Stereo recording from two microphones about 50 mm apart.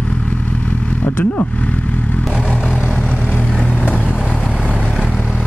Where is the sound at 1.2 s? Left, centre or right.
Left.